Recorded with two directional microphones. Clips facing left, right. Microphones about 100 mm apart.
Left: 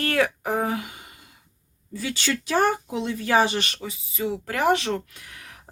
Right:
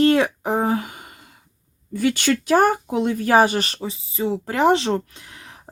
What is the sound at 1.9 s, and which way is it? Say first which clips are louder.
Speech: right 8 dB; 55° right (ahead or behind).